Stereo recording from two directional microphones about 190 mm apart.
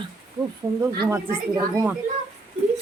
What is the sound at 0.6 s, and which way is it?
Speech, 20° right (ahead or behind).